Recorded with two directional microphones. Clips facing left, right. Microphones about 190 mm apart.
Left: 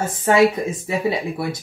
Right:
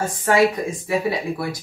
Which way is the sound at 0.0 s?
20° left (ahead or behind).